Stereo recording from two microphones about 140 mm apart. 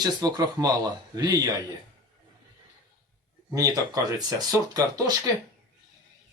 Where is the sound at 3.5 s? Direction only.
25° right (ahead or behind).